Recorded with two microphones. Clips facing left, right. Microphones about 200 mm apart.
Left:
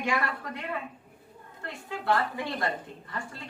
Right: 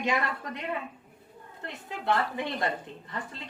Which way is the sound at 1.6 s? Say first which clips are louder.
Left 1 dB; 20° right (ahead or behind).